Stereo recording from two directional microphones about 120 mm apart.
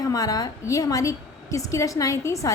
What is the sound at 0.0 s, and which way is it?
A woman's voice, 30° left (ahead or behind).